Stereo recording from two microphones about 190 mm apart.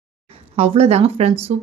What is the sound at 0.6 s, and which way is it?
Speech, 35° right (ahead or behind).